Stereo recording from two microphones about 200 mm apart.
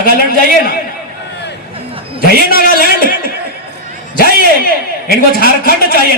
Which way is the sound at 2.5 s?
45° left (ahead or behind).